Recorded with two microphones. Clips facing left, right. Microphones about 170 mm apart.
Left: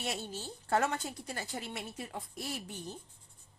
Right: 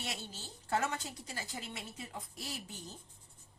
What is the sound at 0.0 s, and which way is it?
A woman's voice, 55° left (ahead or behind).